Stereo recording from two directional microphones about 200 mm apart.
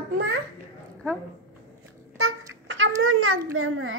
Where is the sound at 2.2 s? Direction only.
70° right (ahead or behind); by 4.0 s 90° right.